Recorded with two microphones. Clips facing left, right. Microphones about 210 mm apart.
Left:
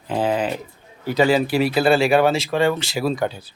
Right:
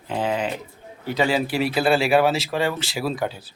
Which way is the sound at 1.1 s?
Centre (ahead or behind).